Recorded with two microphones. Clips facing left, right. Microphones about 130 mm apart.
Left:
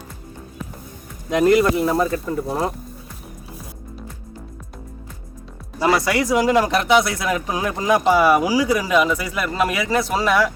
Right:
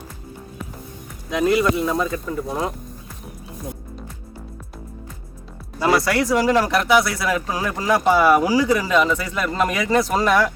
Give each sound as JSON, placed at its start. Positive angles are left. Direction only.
{"t": 1.5, "sound": "speech", "side_deg": 30}
{"t": 5.8, "sound": "speech", "side_deg": 10}